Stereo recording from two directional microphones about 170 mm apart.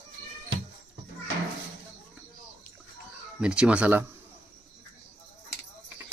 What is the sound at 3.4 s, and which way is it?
Speech, 5° right (ahead or behind).